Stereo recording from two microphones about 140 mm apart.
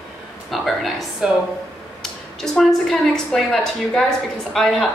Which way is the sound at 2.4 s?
Centre (ahead or behind).